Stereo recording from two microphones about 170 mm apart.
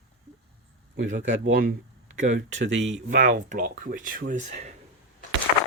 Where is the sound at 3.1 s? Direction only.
50° right (ahead or behind).